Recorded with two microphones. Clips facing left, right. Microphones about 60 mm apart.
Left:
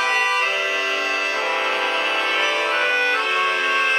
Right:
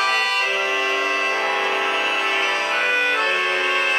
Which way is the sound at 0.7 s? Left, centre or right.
Centre.